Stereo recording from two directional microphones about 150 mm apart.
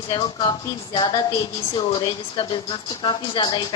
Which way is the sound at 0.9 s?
30° left (ahead or behind).